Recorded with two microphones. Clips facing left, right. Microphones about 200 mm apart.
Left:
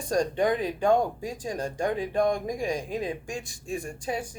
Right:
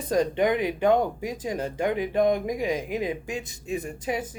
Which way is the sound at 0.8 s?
20° right (ahead or behind).